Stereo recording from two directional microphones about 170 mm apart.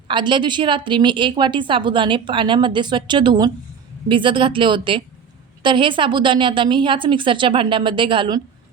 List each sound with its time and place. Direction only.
0.1 s a woman's voice: 25° right (ahead or behind)